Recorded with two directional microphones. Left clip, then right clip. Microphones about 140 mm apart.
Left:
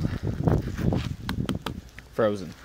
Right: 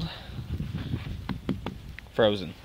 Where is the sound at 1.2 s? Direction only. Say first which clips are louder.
Left 3 dB; 25° left (ahead or behind).